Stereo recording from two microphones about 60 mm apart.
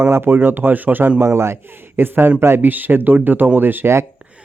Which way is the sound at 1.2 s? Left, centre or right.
Right.